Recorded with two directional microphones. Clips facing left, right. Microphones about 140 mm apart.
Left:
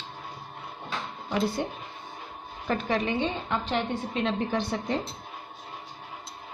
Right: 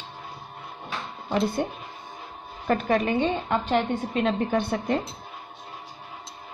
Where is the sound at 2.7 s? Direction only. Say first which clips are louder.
Right 4 dB; 50° right (ahead or behind).